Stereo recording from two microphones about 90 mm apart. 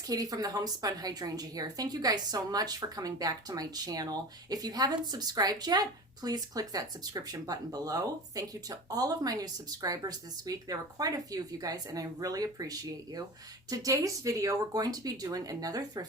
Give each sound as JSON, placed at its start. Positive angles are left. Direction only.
{"t": 0.1, "sound": "a woman's voice", "side_deg": -45}